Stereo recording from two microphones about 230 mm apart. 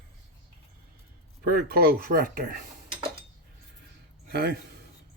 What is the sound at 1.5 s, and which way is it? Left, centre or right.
Speech, right.